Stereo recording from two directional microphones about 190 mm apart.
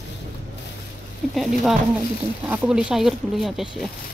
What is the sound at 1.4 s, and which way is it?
Speech, centre (ahead or behind).